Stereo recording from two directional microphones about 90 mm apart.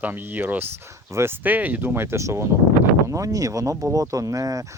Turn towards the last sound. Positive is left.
turn(degrees=-40)  # may be behind; listen again after turning